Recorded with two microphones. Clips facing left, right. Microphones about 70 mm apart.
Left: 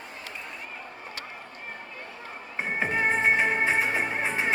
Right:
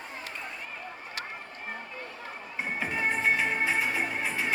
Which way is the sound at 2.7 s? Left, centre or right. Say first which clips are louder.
Left 5 dB; left.